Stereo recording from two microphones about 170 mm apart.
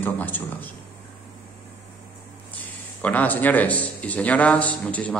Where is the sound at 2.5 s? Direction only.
10° left (ahead or behind).